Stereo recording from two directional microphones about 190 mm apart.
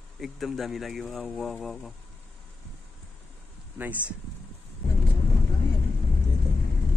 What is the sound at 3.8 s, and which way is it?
Speech, 10° right (ahead or behind).